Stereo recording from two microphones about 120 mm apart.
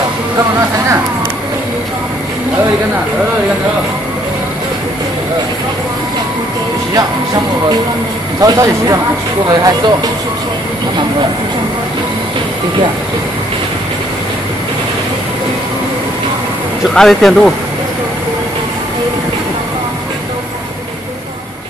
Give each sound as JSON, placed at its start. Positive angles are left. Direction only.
{"t": 8.4, "sound": "speech", "side_deg": -25}
{"t": 16.8, "sound": "speech", "side_deg": 0}